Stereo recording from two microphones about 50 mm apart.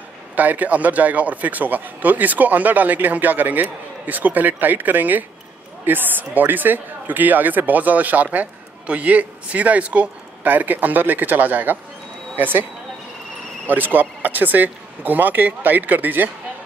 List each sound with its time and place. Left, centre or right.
0.4 s speech: right
13.7 s speech: right